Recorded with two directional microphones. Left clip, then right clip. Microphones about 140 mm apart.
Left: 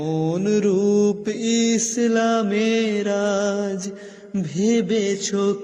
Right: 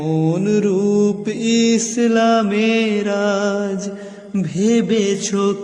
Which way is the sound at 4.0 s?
35° left (ahead or behind).